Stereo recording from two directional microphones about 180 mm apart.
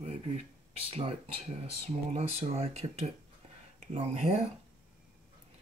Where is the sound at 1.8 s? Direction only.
35° right (ahead or behind).